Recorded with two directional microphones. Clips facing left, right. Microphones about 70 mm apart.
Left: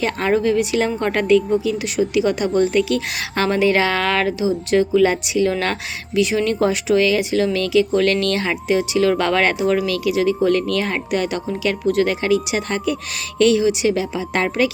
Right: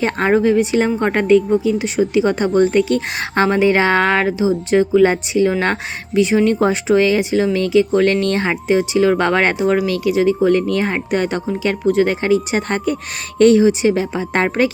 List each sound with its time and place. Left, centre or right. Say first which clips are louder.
0.0 s speech: right 3 dB; right